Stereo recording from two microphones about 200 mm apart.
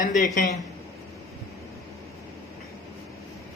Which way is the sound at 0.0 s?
40° left (ahead or behind).